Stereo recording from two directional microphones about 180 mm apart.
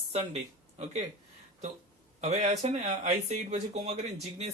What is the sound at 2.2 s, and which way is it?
Speech, 40° right (ahead or behind).